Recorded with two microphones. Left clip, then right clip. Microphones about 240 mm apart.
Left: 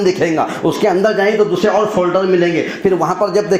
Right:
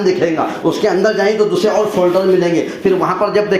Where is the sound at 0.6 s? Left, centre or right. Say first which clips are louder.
Even; left.